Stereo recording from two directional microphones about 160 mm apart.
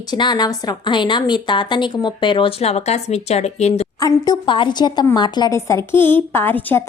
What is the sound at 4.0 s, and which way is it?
A woman's voice, 30° left (ahead or behind).